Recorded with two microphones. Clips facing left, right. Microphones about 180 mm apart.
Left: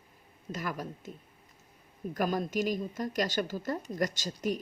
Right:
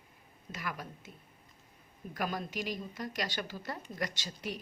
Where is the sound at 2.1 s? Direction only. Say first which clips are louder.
Left 6 dB; 45° left (ahead or behind).